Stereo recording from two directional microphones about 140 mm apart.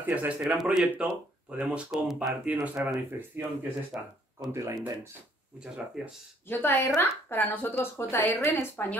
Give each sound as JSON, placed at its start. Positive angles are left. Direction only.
{"t": 0.0, "sound": "speech", "side_deg": -10}
{"t": 6.0, "sound": "speech", "side_deg": -5}
{"t": 6.4, "sound": "a woman's voice", "side_deg": 15}